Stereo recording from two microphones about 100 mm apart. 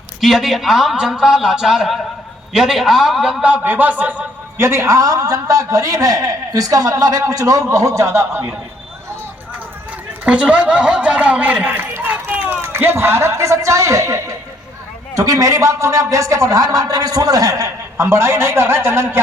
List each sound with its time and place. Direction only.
0.2 s a man's voice: centre (ahead or behind)
3.4 s a man's voice: 15° right (ahead or behind)
10.2 s a man's voice: 10° right (ahead or behind)